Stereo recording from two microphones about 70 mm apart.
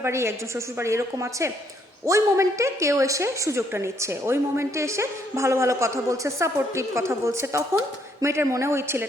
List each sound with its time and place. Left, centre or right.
0.0 s a woman's voice: right